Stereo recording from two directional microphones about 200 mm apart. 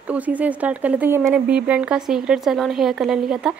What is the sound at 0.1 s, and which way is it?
Speech, 5° right (ahead or behind).